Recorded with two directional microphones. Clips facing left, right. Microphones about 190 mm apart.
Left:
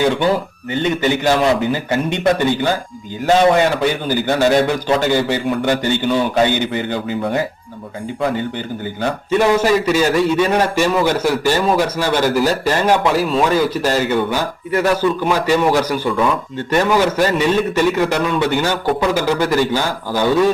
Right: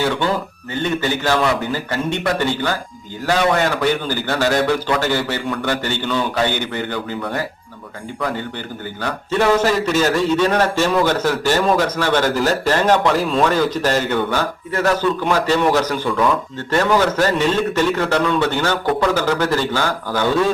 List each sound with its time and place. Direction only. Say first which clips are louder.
0.7 s a man's voice: left 3 dB; 20° left (ahead or behind)
4.0 s a man's voice: left 4 dB; 15° left (ahead or behind)